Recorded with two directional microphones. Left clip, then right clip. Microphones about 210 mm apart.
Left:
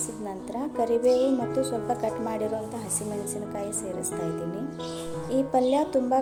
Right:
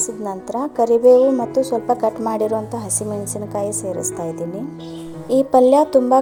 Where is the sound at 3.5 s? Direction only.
30° right (ahead or behind).